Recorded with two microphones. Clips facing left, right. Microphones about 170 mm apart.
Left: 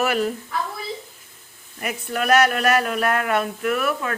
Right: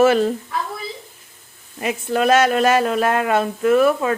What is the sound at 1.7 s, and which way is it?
Speech, 25° right (ahead or behind).